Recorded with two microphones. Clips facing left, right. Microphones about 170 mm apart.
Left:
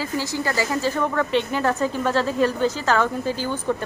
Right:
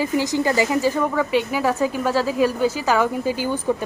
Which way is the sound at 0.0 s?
15° right (ahead or behind).